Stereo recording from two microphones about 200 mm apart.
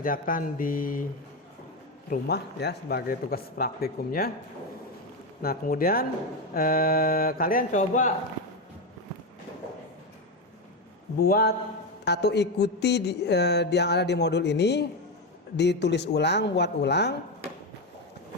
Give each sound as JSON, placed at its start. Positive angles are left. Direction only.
{"t": 0.0, "sound": "a man's voice", "side_deg": 45}
{"t": 2.0, "sound": "a man's voice", "side_deg": 55}
{"t": 5.4, "sound": "a man's voice", "side_deg": 45}
{"t": 11.2, "sound": "a man's voice", "side_deg": 45}
{"t": 12.0, "sound": "a sound", "side_deg": 55}